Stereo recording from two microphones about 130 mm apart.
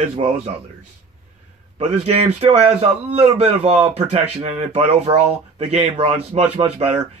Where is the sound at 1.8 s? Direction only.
55° right (ahead or behind).